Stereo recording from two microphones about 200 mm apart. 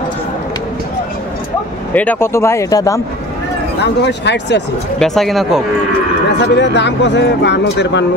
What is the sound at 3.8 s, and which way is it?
Speech, 60° left (ahead or behind).